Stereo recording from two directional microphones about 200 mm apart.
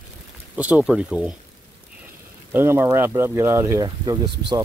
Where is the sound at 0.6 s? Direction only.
5° right (ahead or behind).